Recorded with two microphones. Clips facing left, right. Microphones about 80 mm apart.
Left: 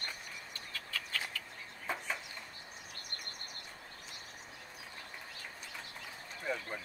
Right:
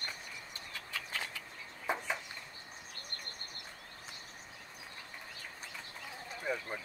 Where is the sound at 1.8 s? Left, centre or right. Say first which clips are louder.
Right 3 dB; centre.